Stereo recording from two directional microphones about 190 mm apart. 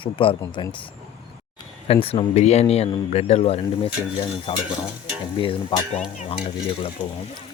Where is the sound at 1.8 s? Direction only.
30° left (ahead or behind).